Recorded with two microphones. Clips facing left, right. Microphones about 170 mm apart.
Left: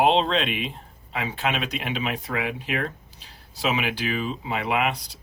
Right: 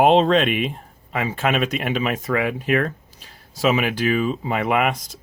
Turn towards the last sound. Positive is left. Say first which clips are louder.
# right 4 dB
turn(degrees=-45)  # may be behind; listen again after turning